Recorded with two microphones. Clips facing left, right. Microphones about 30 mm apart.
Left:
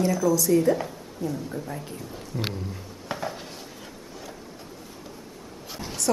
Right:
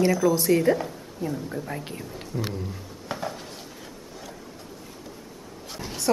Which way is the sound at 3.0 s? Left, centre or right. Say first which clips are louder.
Even; centre.